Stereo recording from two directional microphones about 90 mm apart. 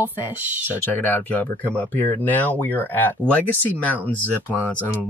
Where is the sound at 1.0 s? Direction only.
20° left (ahead or behind).